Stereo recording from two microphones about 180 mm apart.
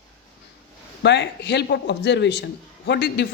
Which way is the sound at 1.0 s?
70° left (ahead or behind).